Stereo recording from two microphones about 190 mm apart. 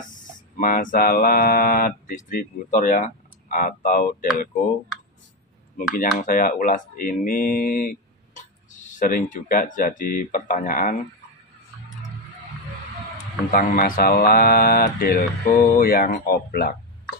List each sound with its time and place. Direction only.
0.6 s speech: 45° left (ahead or behind)
5.9 s speech: 45° left (ahead or behind)
13.5 s speech: 50° left (ahead or behind)